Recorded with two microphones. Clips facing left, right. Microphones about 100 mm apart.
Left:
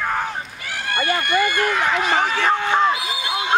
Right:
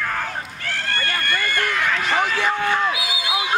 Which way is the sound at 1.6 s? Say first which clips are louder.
Left 3 dB; 35° left (ahead or behind).